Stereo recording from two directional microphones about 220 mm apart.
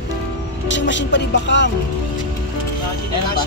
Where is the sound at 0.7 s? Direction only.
55° left (ahead or behind).